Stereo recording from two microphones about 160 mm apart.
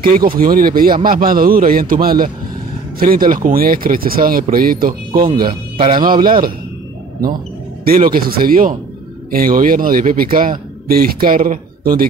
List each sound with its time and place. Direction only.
0.0 s speech: 65° right (ahead or behind)
7.8 s speech: 65° right (ahead or behind)